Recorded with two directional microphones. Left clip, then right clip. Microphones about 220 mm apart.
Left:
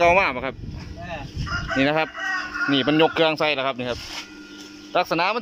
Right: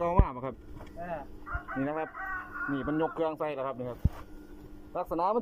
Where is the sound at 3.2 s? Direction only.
25° left (ahead or behind).